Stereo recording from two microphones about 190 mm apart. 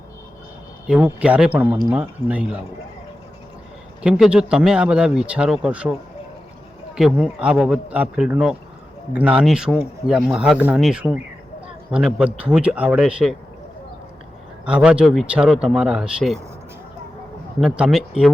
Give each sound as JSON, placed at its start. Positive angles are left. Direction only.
{"t": 0.9, "sound": "speech", "side_deg": -5}
{"t": 4.0, "sound": "speech", "side_deg": -5}
{"t": 14.6, "sound": "speech", "side_deg": -5}
{"t": 17.6, "sound": "speech", "side_deg": -5}